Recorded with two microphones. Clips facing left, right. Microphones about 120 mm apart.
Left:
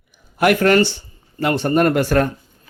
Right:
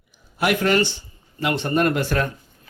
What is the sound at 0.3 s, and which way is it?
Speech, 50° left (ahead or behind).